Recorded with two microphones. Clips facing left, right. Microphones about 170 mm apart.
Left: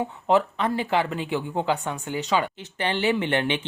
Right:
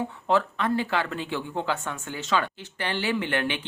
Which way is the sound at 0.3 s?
20° left (ahead or behind).